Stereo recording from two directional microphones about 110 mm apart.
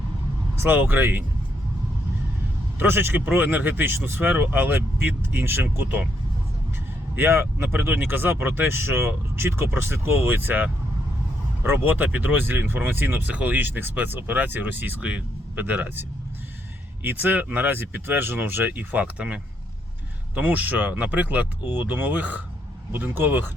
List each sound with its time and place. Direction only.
0.6 s speech: 20° right (ahead or behind)
2.7 s speech: 20° right (ahead or behind)
7.2 s speech: 20° right (ahead or behind)